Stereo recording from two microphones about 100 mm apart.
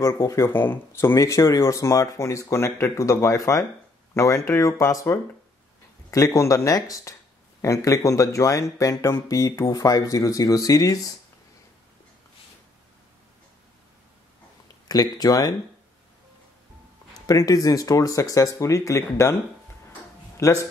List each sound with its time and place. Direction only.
0.0 s speech: 30° left (ahead or behind)
14.9 s speech: 40° left (ahead or behind)
17.3 s speech: 35° left (ahead or behind)
20.3 s speech: 30° left (ahead or behind)